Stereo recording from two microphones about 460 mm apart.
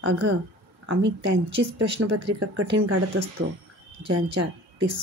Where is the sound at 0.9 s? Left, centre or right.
Right.